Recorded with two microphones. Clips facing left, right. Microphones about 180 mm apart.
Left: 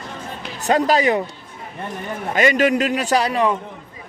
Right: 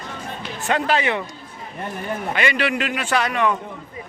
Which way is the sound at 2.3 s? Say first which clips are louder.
Left 7 dB; 40° left (ahead or behind).